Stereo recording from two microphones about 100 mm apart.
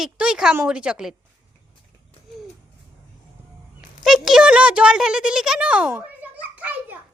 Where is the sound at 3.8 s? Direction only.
5° right (ahead or behind).